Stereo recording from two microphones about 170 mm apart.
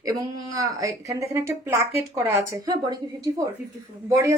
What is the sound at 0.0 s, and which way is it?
A woman's voice, 20° right (ahead or behind).